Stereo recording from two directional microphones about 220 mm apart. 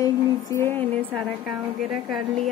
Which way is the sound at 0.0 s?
15° left (ahead or behind).